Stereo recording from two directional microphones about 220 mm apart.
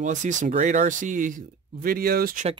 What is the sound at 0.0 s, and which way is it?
Speech, 35° right (ahead or behind).